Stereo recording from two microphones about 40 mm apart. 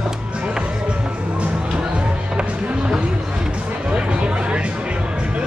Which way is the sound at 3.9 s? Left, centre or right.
Right.